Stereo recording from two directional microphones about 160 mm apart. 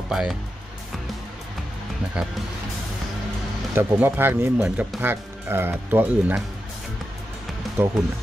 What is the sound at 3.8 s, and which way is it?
Speech, 10° right (ahead or behind).